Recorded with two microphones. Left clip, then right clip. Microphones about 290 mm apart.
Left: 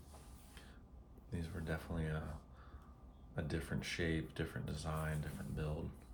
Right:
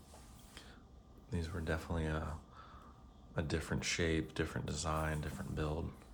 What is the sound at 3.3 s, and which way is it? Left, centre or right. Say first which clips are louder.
Speech: right 4 dB; right.